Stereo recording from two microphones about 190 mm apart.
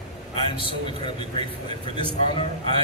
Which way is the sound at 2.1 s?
30° left (ahead or behind).